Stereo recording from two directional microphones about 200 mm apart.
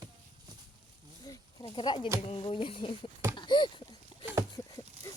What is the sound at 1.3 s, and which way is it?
Speech, 15° left (ahead or behind).